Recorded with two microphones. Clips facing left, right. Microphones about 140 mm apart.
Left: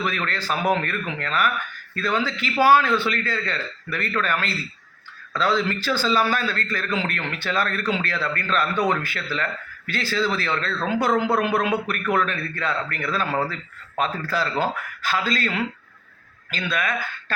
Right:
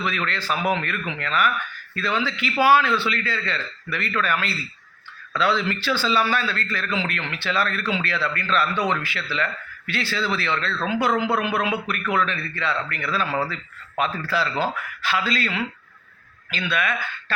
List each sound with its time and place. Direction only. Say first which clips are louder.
0.0 s a man's voice: even; 45° left (ahead or behind)
5.3 s a man's voice: even; 40° left (ahead or behind)